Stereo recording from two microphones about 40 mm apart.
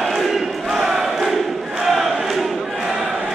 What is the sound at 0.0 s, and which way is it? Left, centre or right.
Crowd, centre.